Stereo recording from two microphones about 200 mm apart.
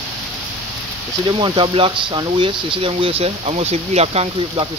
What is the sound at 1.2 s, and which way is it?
Speech, 25° right (ahead or behind).